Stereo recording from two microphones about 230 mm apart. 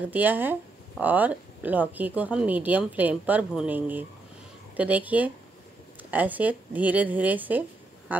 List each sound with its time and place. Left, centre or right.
0.1 s speech: centre